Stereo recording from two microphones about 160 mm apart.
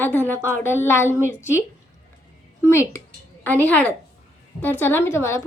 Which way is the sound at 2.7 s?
15° left (ahead or behind).